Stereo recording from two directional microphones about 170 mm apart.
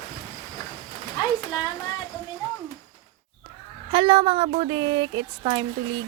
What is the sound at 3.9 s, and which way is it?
Speech, 30° right (ahead or behind).